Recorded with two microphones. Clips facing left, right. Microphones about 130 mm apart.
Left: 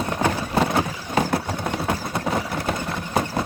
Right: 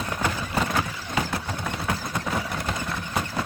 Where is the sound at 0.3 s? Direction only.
35° left (ahead or behind).